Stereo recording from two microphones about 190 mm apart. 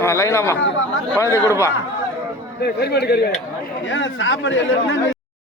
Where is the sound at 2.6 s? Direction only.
55° left (ahead or behind).